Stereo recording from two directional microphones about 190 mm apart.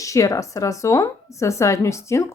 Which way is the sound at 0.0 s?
15° left (ahead or behind).